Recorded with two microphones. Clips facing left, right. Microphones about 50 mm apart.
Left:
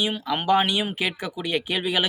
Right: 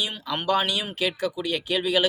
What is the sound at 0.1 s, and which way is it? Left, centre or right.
Speech, centre.